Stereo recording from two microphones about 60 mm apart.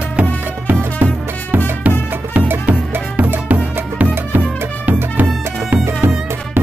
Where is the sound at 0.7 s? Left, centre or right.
Right.